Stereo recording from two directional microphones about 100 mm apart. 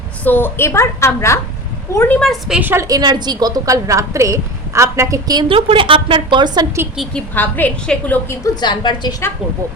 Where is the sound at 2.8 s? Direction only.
40° right (ahead or behind).